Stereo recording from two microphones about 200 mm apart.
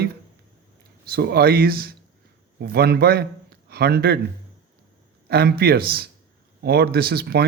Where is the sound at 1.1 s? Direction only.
50° right (ahead or behind).